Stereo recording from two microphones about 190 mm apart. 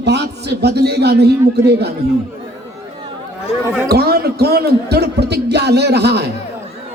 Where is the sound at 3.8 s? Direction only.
55° right (ahead or behind).